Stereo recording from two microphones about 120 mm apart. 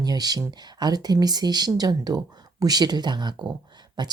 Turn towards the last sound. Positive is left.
turn(degrees=-35)  # may be behind; listen again after turning